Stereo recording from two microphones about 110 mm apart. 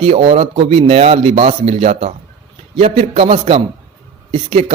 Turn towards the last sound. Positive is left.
turn(degrees=-60)  # may be behind; listen again after turning